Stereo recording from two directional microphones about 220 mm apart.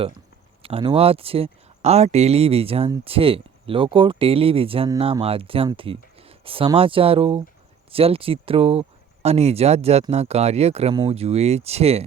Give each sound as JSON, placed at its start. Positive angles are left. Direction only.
{"t": 0.6, "sound": "speech", "side_deg": -25}